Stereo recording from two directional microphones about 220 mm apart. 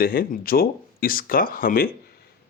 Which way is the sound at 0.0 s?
40° left (ahead or behind).